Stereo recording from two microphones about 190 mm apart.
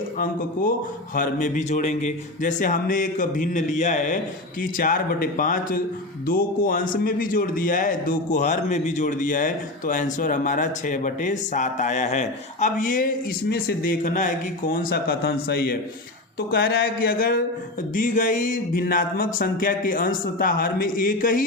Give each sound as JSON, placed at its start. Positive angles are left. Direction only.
{"t": 0.2, "sound": "a man's voice", "side_deg": 45}